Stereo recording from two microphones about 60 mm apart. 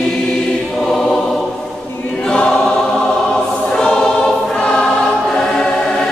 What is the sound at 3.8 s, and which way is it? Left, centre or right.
Choir, centre.